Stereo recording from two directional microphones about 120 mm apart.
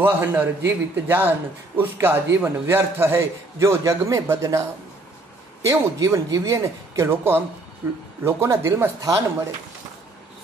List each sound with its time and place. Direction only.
0.0 s a man's voice: 15° right (ahead or behind)